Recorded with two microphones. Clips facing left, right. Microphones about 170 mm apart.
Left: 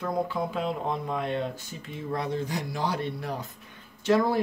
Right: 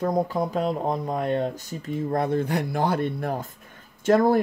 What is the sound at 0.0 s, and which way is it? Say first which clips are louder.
Speech: right 5 dB; 40° right (ahead or behind).